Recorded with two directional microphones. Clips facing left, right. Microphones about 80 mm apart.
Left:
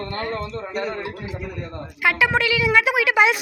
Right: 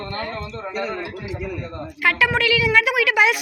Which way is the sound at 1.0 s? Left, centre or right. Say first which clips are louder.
Even; left.